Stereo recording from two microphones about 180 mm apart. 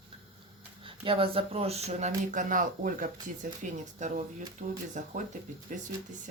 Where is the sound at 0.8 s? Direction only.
30° right (ahead or behind).